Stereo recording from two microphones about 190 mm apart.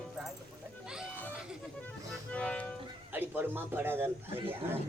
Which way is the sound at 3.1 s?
10° right (ahead or behind).